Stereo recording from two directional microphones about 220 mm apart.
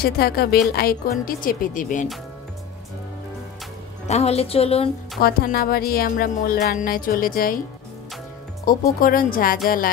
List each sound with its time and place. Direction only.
0.0 s music: 45° left (ahead or behind)
4.1 s a woman's voice: 30° left (ahead or behind)
5.2 s music: 45° left (ahead or behind)
8.7 s music: 40° left (ahead or behind)